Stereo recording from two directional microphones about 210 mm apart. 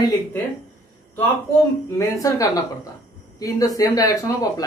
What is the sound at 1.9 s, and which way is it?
Speech, 15° left (ahead or behind).